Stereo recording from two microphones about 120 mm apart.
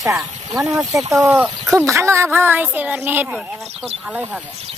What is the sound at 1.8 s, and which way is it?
Speech, 25° right (ahead or behind).